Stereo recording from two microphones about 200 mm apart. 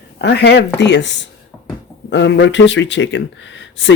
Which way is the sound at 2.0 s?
60° left (ahead or behind).